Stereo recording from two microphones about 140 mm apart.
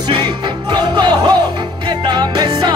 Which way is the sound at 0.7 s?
30° right (ahead or behind).